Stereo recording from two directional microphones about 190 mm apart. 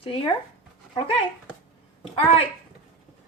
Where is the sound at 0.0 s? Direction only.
30° left (ahead or behind).